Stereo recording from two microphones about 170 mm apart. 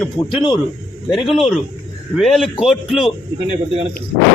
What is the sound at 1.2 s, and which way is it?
A man's voice, centre (ahead or behind).